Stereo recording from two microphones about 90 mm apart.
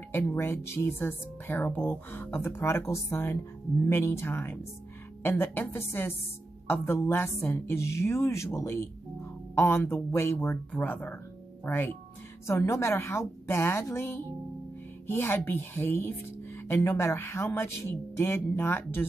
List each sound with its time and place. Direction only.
0.1 s speech: 25° left (ahead or behind)
10.3 s a woman's voice: 15° left (ahead or behind)